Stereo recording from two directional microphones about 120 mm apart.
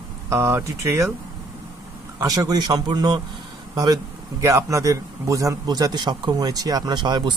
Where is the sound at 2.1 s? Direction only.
30° right (ahead or behind).